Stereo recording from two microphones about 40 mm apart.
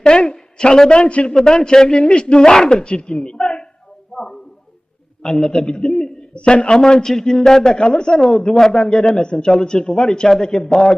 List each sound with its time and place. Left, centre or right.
0.0 s a woman's voice: left
1.4 s a man's voice: centre
4.1 s a sound: centre
5.2 s a man's voice: centre
5.5 s a man's voice: left